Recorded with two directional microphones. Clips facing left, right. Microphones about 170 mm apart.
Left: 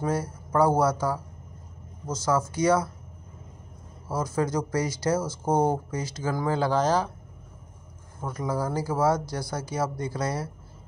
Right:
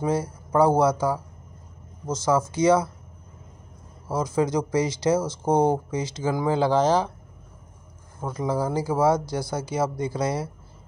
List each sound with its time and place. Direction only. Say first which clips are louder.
0.0 s speech: right 3 dB; 20° right (ahead or behind)
4.1 s speech: right 3 dB; 20° right (ahead or behind)
8.2 s speech: right 3 dB; 20° right (ahead or behind)